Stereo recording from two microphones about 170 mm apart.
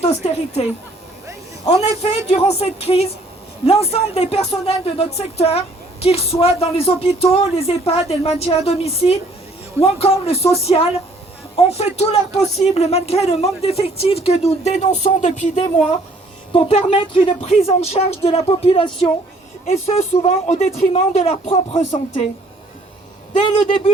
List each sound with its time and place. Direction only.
0.0 s speech: 35° left (ahead or behind)